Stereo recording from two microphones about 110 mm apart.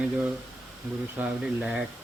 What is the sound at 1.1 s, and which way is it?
Speech, 15° right (ahead or behind).